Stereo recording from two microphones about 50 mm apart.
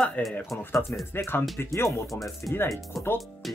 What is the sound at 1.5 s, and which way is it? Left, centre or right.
Speech, left.